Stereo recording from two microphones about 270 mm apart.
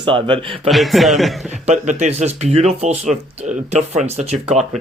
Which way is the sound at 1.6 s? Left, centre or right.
Right.